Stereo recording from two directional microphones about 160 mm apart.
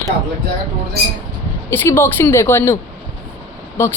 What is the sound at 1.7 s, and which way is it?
A woman's voice, 15° left (ahead or behind).